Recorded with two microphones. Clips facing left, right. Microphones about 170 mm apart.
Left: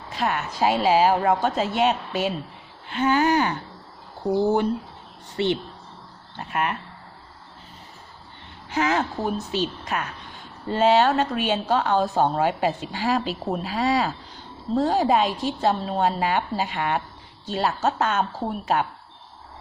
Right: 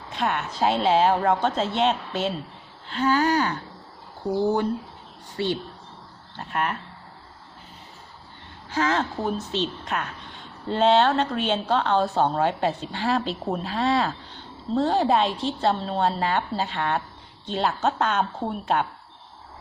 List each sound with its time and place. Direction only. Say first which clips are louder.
0.1 s a woman's voice: left 1 dB; centre (ahead or behind)
2.9 s a sound: left 1 dB; 20° left (ahead or behind)
6.4 s a woman's voice: left 1 dB; 5° left (ahead or behind)
8.7 s a woman's voice: left 1 dB; 15° left (ahead or behind)